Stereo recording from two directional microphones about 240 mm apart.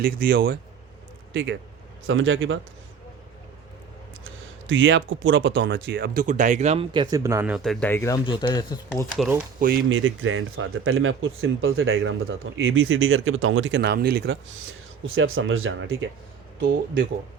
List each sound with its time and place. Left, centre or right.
0.0 s speech: right
1.3 s speech: right
4.6 s speech: right; by 9.0 s centre
9.6 s speech: right
10.0 s speech: right
15.0 s speech: right